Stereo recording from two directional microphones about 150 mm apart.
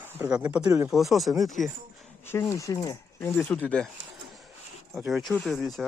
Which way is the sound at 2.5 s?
20° left (ahead or behind).